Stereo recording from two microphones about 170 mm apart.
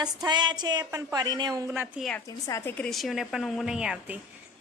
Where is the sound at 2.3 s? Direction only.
20° left (ahead or behind).